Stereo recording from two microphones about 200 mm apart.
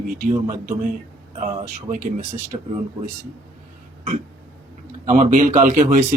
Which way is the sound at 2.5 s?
20° right (ahead or behind).